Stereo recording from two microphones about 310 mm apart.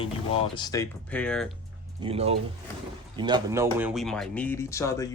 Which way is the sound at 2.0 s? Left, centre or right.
Centre.